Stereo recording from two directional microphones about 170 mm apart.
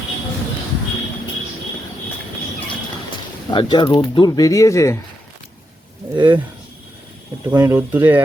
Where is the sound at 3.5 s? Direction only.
25° left (ahead or behind).